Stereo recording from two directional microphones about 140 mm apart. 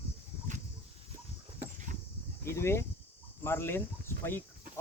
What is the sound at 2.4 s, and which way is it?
Speech, 20° left (ahead or behind).